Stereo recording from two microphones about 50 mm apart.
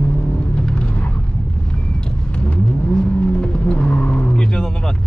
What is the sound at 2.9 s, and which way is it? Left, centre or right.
Vehicle, left.